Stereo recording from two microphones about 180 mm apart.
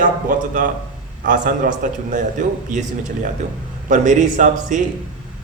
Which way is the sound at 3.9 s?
45° right (ahead or behind).